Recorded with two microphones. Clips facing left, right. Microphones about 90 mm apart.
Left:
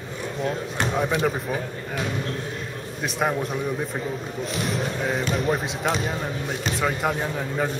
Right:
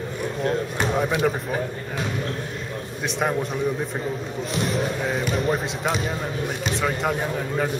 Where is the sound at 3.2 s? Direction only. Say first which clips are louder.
Even; centre (ahead or behind).